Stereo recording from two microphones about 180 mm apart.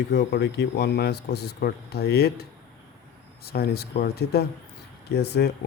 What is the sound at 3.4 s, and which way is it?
Speech, 60° left (ahead or behind).